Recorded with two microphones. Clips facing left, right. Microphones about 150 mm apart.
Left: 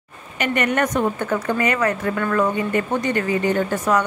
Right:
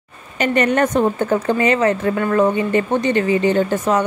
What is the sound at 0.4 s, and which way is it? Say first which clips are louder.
A woman's voice: right 4 dB; 30° right (ahead or behind).